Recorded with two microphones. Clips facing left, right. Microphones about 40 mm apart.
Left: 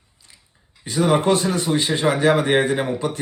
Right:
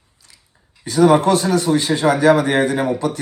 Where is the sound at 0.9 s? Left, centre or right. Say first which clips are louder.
Right 5 dB; left.